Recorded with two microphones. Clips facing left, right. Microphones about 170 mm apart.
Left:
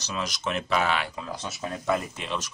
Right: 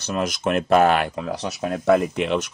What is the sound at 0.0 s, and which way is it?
Speech, 55° right (ahead or behind).